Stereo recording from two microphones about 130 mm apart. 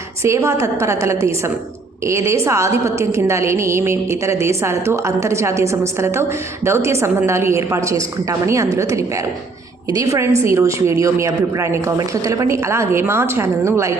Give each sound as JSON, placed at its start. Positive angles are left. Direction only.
{"t": 0.2, "sound": "a woman's voice", "side_deg": -20}